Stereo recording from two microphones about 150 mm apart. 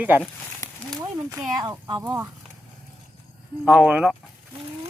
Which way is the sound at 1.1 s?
20° right (ahead or behind).